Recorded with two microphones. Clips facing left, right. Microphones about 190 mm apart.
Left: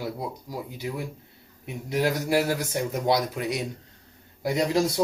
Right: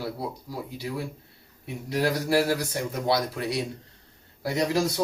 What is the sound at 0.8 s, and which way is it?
Speech, 20° left (ahead or behind).